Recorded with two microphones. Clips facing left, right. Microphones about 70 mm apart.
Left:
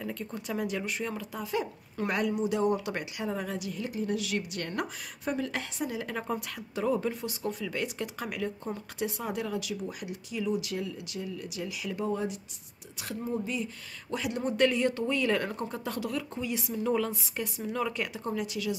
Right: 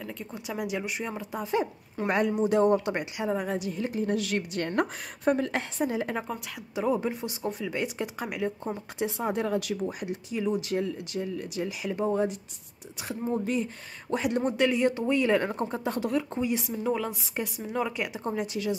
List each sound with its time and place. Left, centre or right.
0.0 s speech: centre; by 2.3 s right
2.3 s speech: right
2.9 s speech: right
6.7 s speech: centre; by 9.8 s right
9.8 s speech: right
14.1 s speech: right
14.6 s speech: centre
18.2 s speech: right